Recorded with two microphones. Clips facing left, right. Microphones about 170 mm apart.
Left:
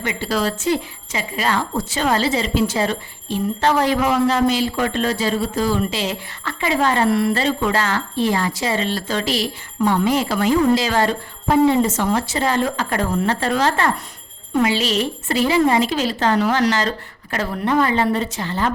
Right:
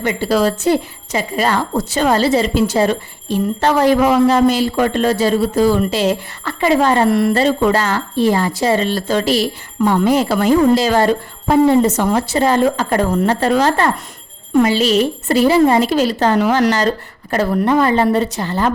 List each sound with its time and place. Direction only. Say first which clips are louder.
0.0 s speech: right 6 dB; 45° right (ahead or behind)
5.6 s speech: right 7 dB; 50° right (ahead or behind)